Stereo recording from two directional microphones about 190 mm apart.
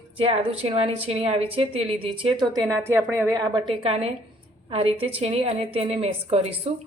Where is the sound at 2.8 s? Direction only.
15° right (ahead or behind).